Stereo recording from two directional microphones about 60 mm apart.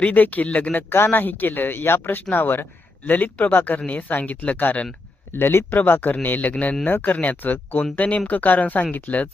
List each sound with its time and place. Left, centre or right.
0.0 s speech: left
5.3 s speech: left